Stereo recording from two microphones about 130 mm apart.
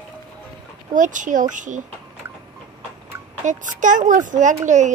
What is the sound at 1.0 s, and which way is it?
Speech, 80° right.